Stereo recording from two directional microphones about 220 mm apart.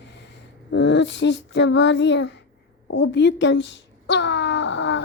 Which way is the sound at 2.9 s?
55° left (ahead or behind).